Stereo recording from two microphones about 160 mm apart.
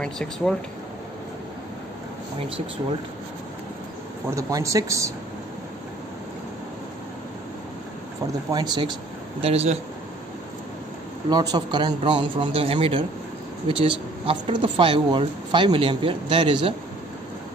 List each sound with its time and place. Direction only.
0.0 s speech: 5° left (ahead or behind)
4.3 s a man's voice: 20° right (ahead or behind)
8.5 s a man's voice: 25° right (ahead or behind)
9.4 s speech: 40° right (ahead or behind)
11.2 s a man's voice: 25° right (ahead or behind)